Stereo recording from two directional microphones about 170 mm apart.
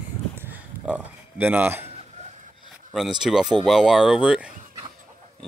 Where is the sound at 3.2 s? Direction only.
5° right (ahead or behind).